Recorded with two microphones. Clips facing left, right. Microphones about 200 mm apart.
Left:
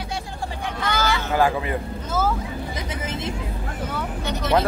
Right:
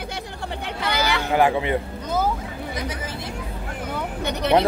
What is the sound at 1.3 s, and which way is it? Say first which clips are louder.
A man's voice: right 3 dB; 20° right (ahead or behind).